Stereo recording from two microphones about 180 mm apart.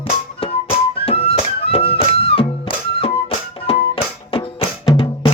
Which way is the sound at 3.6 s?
30° left (ahead or behind).